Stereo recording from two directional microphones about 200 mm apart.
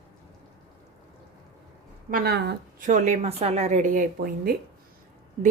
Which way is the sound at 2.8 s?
35° right (ahead or behind).